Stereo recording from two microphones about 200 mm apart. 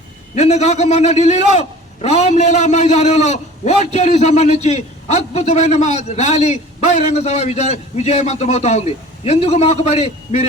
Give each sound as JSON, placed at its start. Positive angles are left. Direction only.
{"t": 0.3, "sound": "a man's voice", "side_deg": 35}